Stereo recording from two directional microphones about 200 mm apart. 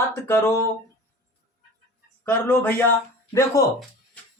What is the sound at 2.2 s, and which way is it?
Speech, 10° left (ahead or behind).